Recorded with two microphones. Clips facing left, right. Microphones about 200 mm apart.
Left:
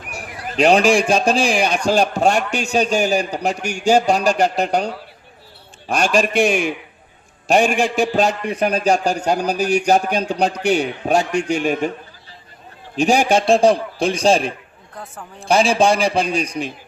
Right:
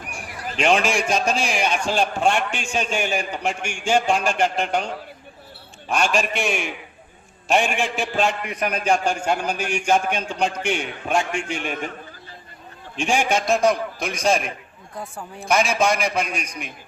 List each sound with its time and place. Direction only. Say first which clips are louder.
0.1 s a man's voice: left 5 dB; 40° left (ahead or behind)
13.0 s a man's voice: left 6 dB; 40° left (ahead or behind)
14.9 s speech: right 2 dB; 10° right (ahead or behind)
15.4 s a man's voice: left 5 dB; 30° left (ahead or behind)